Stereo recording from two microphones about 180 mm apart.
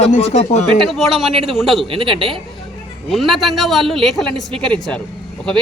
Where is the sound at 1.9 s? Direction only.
30° right (ahead or behind).